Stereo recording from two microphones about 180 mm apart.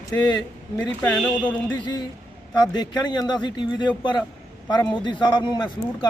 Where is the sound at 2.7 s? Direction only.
25° left (ahead or behind).